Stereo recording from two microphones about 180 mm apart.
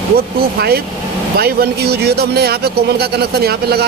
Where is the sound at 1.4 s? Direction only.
60° right (ahead or behind).